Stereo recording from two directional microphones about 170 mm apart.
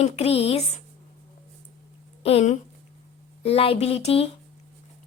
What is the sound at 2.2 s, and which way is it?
Speech, 40° left (ahead or behind).